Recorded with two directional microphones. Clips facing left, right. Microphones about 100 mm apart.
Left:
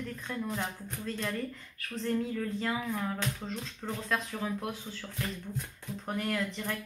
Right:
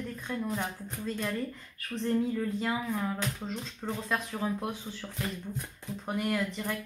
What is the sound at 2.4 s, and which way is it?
Speech, 10° right (ahead or behind).